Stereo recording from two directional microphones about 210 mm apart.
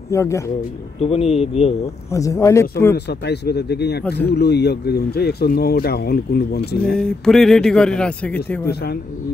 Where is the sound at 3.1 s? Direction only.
50° left (ahead or behind).